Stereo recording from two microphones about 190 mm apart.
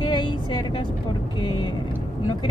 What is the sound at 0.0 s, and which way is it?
Vehicle, 25° left (ahead or behind).